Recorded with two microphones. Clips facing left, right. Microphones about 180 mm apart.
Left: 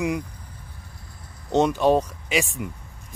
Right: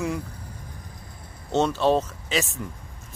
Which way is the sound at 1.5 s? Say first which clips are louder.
Left 2 dB; 15° left (ahead or behind).